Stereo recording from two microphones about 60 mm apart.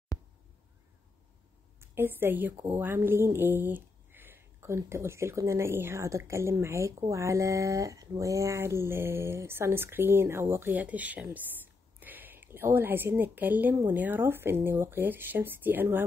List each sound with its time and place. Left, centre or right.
1.8 s a woman's voice: right
6.0 s speech: right
10.7 s a woman's voice: right